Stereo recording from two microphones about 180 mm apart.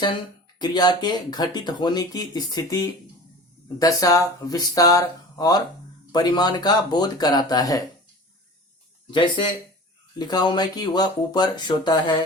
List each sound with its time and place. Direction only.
0.6 s speech: 25° left (ahead or behind)
9.0 s speech: 25° left (ahead or behind)